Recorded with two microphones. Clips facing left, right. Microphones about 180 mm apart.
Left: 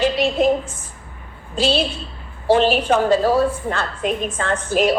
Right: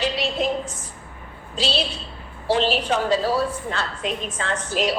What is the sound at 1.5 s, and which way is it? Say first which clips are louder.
A woman's voice: left 6 dB; 50° left (ahead or behind).